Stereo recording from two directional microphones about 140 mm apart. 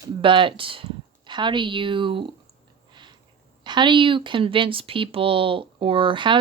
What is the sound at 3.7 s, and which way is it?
Speech, 35° right (ahead or behind).